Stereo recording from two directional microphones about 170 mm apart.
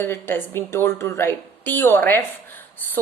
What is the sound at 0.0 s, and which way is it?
A woman's voice, 15° left (ahead or behind).